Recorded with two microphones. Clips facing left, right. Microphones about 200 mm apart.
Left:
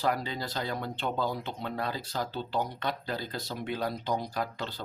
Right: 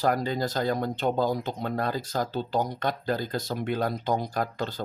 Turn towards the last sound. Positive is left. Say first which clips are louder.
# right 5 dB
turn(degrees=-45)  # may be behind; listen again after turning